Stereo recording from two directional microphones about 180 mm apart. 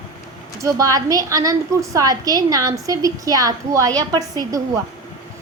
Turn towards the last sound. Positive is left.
turn(degrees=-20)  # may be behind; listen again after turning